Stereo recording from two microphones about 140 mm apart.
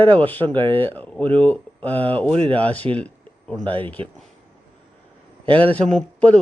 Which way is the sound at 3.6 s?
40° right (ahead or behind).